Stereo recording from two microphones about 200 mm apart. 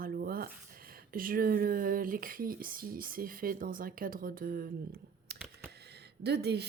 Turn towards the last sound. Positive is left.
turn(degrees=-55)  # may be behind; listen again after turning